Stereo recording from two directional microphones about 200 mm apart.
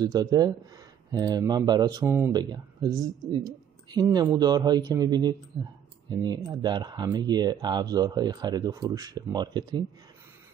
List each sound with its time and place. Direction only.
0.0 s speech: 20° right (ahead or behind)